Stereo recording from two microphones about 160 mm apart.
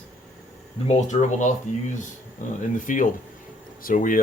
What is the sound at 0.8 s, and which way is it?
Speech, 45° left (ahead or behind).